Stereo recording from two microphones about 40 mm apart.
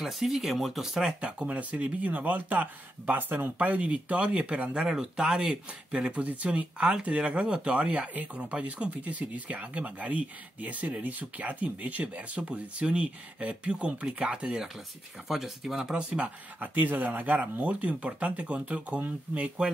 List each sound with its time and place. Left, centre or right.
0.0 s speech: centre
1.2 s speech: right
3.6 s speech: right; by 5.6 s centre
5.7 s speech: right
15.2 s speech: centre
15.9 s speech: right
16.5 s speech: right
19.4 s speech: right